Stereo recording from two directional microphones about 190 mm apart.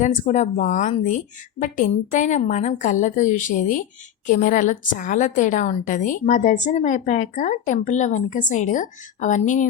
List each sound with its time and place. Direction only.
0.0 s a woman's voice: 40° left (ahead or behind)